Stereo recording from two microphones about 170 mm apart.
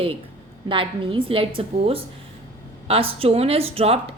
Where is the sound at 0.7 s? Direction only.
30° right (ahead or behind).